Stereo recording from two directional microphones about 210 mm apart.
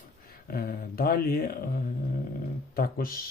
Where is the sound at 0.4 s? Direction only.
45° left (ahead or behind).